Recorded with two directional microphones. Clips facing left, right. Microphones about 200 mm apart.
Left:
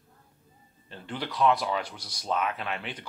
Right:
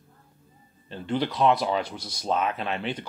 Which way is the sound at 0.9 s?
25° right (ahead or behind).